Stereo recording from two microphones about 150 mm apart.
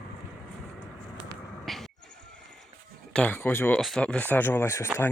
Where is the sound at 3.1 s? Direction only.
10° left (ahead or behind).